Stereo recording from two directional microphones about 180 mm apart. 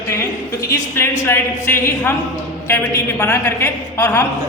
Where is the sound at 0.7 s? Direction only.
15° left (ahead or behind).